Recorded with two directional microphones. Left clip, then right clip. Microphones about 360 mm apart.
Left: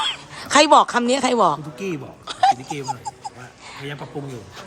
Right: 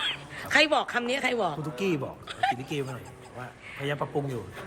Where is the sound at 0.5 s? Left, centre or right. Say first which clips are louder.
Left 10 dB; centre.